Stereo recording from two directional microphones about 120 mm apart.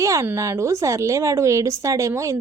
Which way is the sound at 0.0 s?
25° right (ahead or behind).